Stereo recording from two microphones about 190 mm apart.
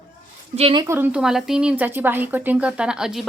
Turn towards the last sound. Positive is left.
turn(degrees=0)  # may be behind; listen again after turning